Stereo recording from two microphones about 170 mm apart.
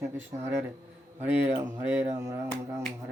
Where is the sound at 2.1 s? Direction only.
15° right (ahead or behind).